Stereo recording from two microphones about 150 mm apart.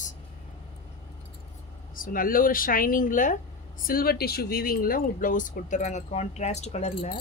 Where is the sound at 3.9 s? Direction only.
85° left; by 7.1 s 45° left (ahead or behind).